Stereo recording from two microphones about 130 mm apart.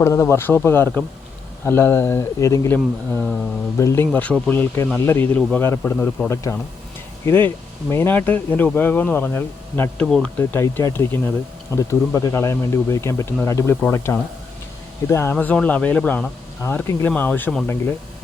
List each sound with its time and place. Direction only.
0.0 s speech: 20° left (ahead or behind)
2.7 s speech: 10° left (ahead or behind)
3.8 s speech: 20° left (ahead or behind)
10.1 s speech: centre (ahead or behind)
10.3 s speech: 15° left (ahead or behind)